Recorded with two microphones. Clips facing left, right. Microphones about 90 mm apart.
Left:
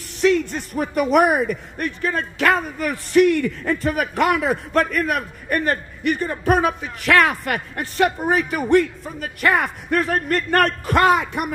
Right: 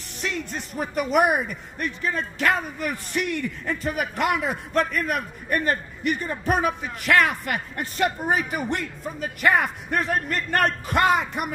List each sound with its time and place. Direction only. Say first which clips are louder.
0.2 s speech: left 12 dB; 55° left (ahead or behind)